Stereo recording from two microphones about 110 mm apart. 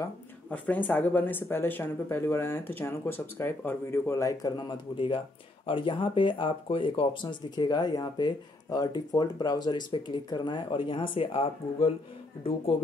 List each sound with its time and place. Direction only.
0.5 s speech: 15° left (ahead or behind); by 11.9 s 55° left (ahead or behind)